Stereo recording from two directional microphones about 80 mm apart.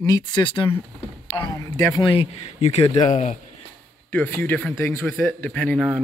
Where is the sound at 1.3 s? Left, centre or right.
Left.